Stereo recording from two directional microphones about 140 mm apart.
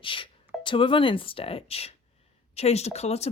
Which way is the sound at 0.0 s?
35° left (ahead or behind).